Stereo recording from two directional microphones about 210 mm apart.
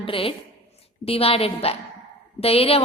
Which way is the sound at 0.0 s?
25° left (ahead or behind).